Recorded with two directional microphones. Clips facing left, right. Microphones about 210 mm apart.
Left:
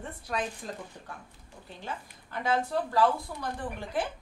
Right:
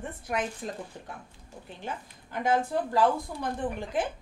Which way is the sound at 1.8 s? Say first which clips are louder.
Right 1 dB; 15° right (ahead or behind).